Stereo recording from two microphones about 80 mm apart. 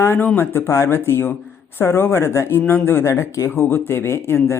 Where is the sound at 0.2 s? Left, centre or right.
Left.